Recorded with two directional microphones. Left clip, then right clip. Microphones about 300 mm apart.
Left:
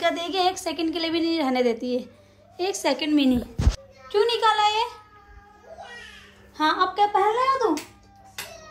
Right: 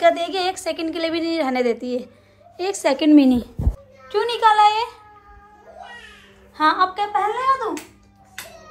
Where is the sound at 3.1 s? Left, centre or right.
Centre.